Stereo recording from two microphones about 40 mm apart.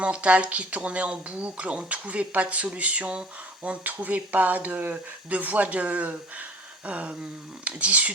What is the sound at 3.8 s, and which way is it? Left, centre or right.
Speech, right.